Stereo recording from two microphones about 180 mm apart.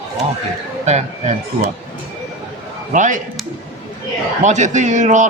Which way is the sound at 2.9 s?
45° right (ahead or behind).